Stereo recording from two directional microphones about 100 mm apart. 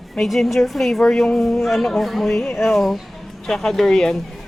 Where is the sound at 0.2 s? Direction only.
Centre (ahead or behind).